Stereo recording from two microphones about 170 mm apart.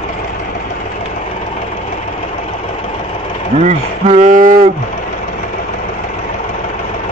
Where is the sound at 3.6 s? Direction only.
45° right (ahead or behind).